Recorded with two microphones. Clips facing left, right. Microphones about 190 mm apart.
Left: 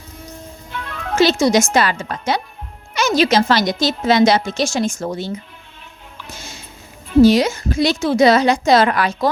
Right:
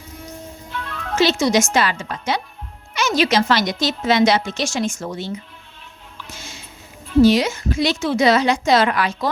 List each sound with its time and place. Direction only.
0.7 s music: 5° left (ahead or behind)
1.1 s speech: 40° left (ahead or behind)
6.3 s music: 40° left (ahead or behind)
7.2 s speech: 40° left (ahead or behind)